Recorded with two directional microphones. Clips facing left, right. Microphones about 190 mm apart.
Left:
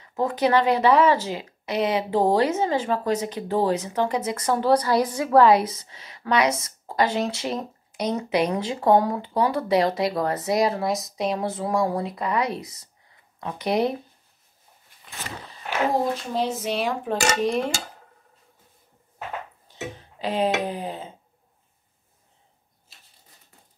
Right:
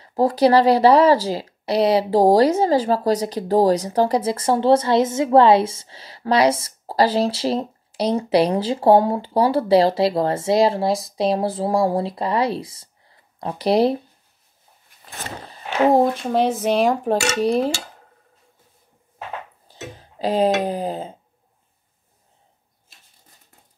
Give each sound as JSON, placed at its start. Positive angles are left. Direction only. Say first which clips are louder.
{"t": 0.0, "sound": "speech", "louder": "right 6 dB", "side_deg": -35}
{"t": 15.0, "sound": "a sound", "louder": "right 3 dB", "side_deg": -35}
{"t": 16.0, "sound": "speech", "louder": "right 7 dB", "side_deg": -55}
{"t": 19.7, "sound": "speech", "louder": "left 2 dB", "side_deg": -35}